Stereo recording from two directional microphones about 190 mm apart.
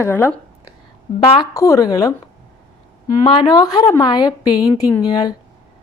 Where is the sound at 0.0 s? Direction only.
10° left (ahead or behind).